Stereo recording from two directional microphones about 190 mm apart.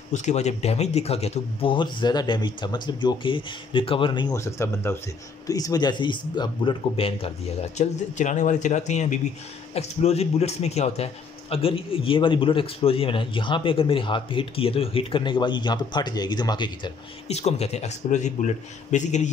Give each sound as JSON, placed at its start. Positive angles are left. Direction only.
{"t": 0.1, "sound": "a man's voice", "side_deg": 40}
{"t": 17.4, "sound": "speech", "side_deg": 35}